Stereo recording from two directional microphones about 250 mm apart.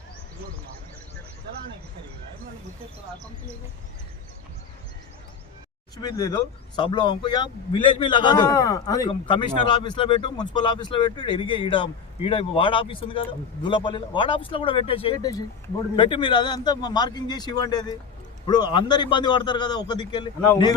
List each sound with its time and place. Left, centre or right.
6.0 s a man's voice: centre